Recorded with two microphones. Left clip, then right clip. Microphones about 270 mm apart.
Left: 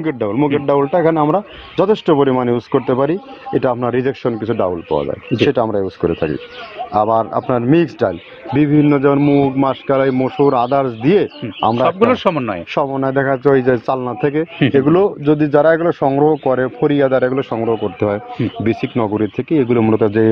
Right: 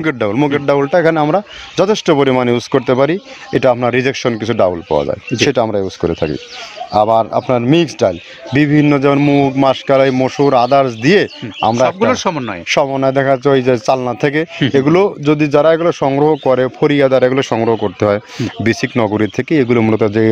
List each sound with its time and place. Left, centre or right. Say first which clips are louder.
0.0 s speech: right 2 dB; right
12.0 s speech: even; centre
12.6 s speech: right 7 dB; right